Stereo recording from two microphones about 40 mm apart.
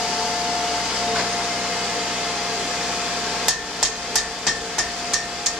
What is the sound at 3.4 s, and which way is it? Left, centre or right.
Hammer, centre.